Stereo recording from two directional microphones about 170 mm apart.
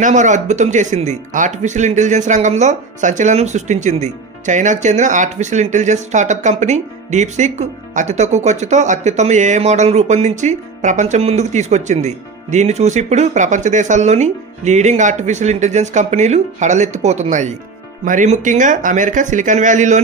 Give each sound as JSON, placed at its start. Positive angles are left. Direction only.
{"t": 0.0, "sound": "speech", "side_deg": -45}